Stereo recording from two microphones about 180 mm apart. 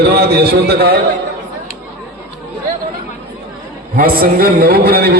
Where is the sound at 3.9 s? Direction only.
55° right (ahead or behind).